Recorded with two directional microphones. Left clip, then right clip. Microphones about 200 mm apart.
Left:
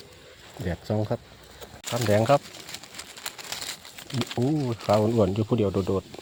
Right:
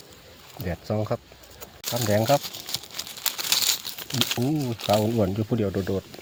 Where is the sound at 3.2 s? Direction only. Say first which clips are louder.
Right 11 dB; 5° right (ahead or behind).